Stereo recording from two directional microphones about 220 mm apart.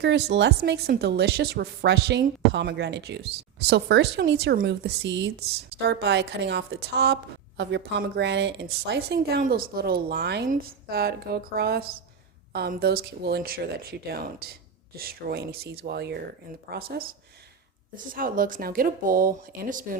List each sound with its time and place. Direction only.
0.0 s a woman's voice: 50° right (ahead or behind)
18.1 s speech: 40° right (ahead or behind)